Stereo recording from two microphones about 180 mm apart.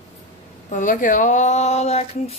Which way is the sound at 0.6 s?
45° left (ahead or behind).